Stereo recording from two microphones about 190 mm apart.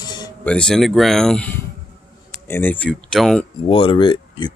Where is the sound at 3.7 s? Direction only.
25° left (ahead or behind).